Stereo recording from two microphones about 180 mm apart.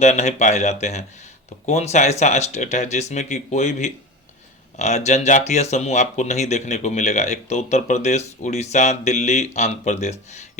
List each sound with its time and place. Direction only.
0.0 s speech: 40° left (ahead or behind)